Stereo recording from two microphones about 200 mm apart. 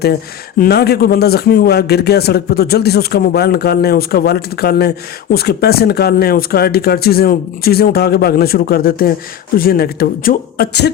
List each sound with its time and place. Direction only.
0.6 s a man's voice: 50° left (ahead or behind)